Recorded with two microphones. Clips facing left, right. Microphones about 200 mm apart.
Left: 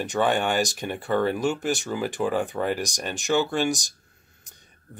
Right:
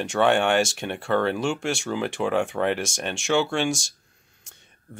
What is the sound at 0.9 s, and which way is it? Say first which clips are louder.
Speech: right 1 dB; 20° left (ahead or behind).